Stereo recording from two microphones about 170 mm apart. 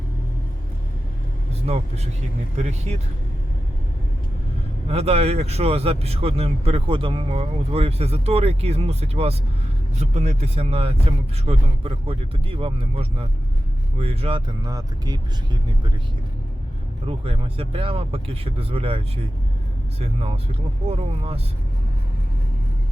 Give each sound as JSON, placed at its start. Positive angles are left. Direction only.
{"t": 1.7, "sound": "speech", "side_deg": -35}
{"t": 4.9, "sound": "speech", "side_deg": -35}
{"t": 17.1, "sound": "speech", "side_deg": -35}